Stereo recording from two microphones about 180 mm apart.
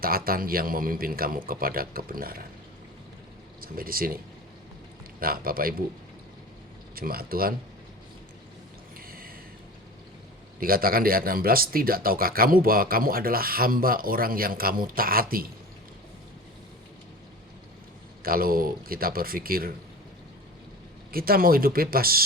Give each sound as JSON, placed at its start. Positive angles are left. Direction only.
{"t": 0.3, "sound": "speech", "side_deg": -55}
{"t": 3.6, "sound": "speech", "side_deg": -55}
{"t": 5.2, "sound": "speech", "side_deg": -55}
{"t": 6.9, "sound": "speech", "side_deg": -55}
{"t": 9.0, "sound": "a sound", "side_deg": -55}
{"t": 10.6, "sound": "speech", "side_deg": -55}
{"t": 18.2, "sound": "speech", "side_deg": -55}
{"t": 21.1, "sound": "speech", "side_deg": -55}